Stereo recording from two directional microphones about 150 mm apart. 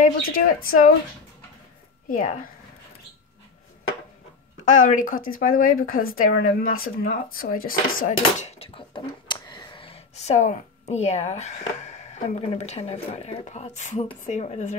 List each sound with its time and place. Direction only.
0.0 s speech: 70° left (ahead or behind)
2.0 s speech: 65° left (ahead or behind)
4.6 s speech: 60° left (ahead or behind)
8.5 s speech: 40° left (ahead or behind)